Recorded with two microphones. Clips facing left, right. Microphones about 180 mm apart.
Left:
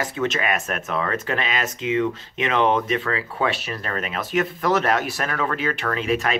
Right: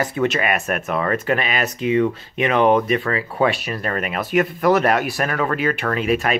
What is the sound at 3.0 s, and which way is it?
Speech, 35° right (ahead or behind).